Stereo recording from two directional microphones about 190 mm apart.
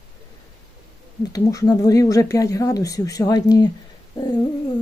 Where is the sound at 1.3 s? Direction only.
20° left (ahead or behind).